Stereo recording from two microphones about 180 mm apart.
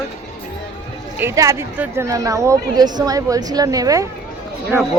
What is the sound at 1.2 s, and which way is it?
A woman's voice, 15° right (ahead or behind).